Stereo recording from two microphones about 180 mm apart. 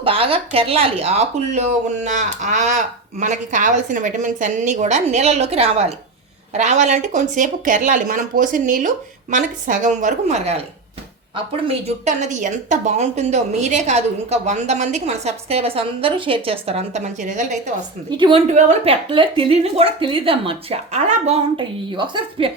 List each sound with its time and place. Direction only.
0.0 s speech: 30° right (ahead or behind)
12.0 s speech: 40° right (ahead or behind)
18.2 s a woman's voice: 30° right (ahead or behind)
18.5 s speech: 40° right (ahead or behind)
19.1 s speech: 30° right (ahead or behind)